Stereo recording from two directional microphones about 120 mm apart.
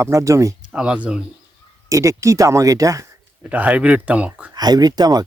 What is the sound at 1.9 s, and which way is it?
A man's voice, 25° right (ahead or behind).